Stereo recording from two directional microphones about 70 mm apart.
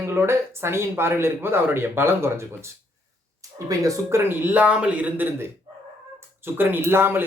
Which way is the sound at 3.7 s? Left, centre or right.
Right.